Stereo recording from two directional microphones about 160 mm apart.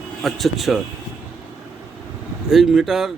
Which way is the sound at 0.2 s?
Centre (ahead or behind).